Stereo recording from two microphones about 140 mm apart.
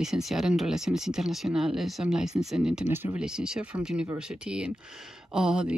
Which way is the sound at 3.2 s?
5° right (ahead or behind).